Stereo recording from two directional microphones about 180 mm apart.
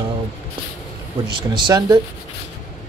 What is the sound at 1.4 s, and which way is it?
Speech, 25° right (ahead or behind).